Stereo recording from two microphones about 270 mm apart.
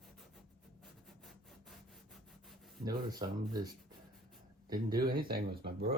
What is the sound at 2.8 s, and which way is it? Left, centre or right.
Speech, centre.